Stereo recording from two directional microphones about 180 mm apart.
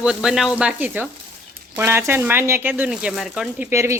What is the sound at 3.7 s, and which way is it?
Speech, 15° right (ahead or behind).